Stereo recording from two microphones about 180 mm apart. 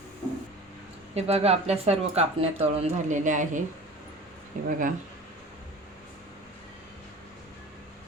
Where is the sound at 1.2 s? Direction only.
35° right (ahead or behind).